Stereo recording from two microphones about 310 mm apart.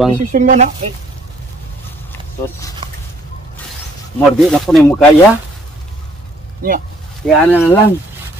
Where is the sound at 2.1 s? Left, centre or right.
Centre.